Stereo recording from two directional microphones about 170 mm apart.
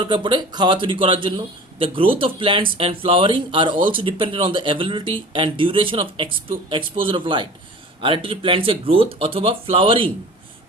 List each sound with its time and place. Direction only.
0.0 s speech: 30° right (ahead or behind)